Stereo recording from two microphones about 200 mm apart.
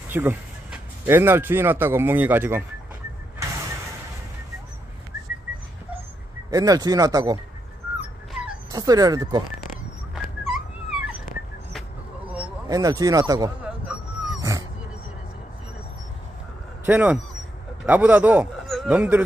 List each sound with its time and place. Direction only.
0.1 s speech: 10° right (ahead or behind)
6.5 s speech: 20° right (ahead or behind)
8.0 s dog: 5° right (ahead or behind)
8.7 s speech: 20° right (ahead or behind)
10.1 s dog: 5° right (ahead or behind)
12.6 s speech: 20° right (ahead or behind)
13.7 s dog: 5° right (ahead or behind)
16.8 s a man's voice: 10° right (ahead or behind)